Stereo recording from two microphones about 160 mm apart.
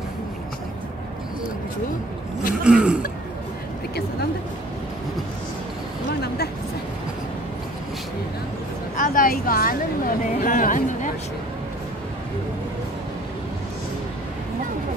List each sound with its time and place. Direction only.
2.6 s throat clearing: 5° right (ahead or behind)
6.2 s a sound: 80° left
8.9 s a woman's voice: 60° left (ahead or behind)